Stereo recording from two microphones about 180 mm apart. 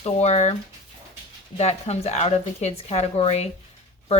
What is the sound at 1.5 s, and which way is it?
Speech, 35° left (ahead or behind).